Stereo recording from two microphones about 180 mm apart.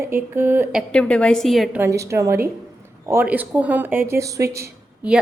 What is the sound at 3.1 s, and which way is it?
A woman's voice, 10° right (ahead or behind).